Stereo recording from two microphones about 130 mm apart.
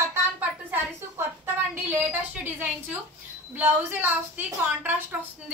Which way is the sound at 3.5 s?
15° right (ahead or behind).